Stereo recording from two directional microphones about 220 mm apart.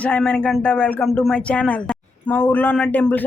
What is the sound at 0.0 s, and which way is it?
Speech, 5° left (ahead or behind).